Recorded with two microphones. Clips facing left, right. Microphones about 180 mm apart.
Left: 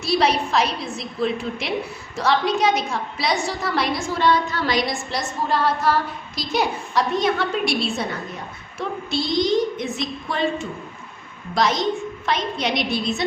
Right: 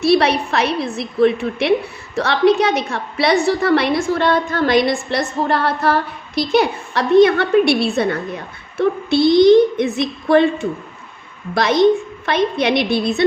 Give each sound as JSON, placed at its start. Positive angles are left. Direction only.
{"t": 0.0, "sound": "a woman's voice", "side_deg": -65}